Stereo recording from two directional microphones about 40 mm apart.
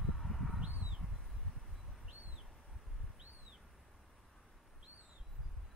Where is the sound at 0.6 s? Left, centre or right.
Right.